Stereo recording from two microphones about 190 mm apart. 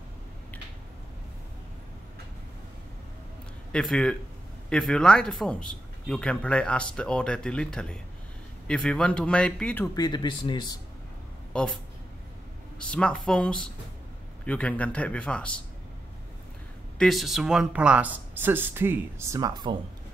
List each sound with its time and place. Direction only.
3.7 s a man's voice: 5° left (ahead or behind)
9.9 s speech: 20° left (ahead or behind)
11.5 s a man's voice: 5° left (ahead or behind)
17.0 s speech: centre (ahead or behind); by 19.8 s 20° right (ahead or behind)